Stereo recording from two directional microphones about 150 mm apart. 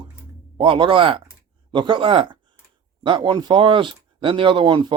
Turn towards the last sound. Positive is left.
turn(degrees=-30)  # may be behind; listen again after turning